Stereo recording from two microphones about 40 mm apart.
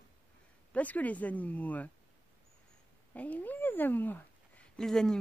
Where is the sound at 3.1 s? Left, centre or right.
Left.